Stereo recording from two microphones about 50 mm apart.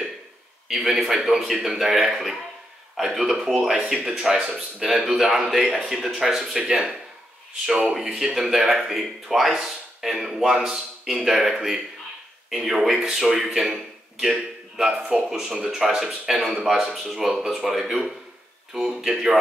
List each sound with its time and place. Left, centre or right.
0.7 s a man's voice: centre
4.8 s a man's voice: centre
7.6 s a man's voice: centre